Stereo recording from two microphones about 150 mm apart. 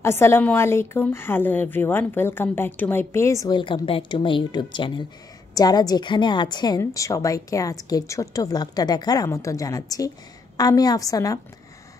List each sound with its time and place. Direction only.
0.0 s a woman's voice: 15° left (ahead or behind)